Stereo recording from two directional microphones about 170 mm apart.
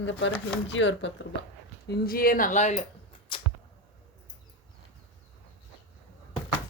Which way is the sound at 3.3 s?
30° left (ahead or behind).